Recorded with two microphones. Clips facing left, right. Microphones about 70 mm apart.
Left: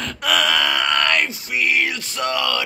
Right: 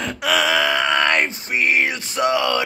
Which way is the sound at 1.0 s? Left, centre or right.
Right.